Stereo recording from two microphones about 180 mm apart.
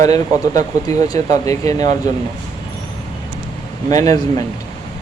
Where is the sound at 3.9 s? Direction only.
20° left (ahead or behind).